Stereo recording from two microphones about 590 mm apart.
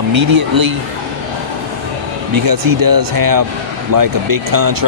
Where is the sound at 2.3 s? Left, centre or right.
Right.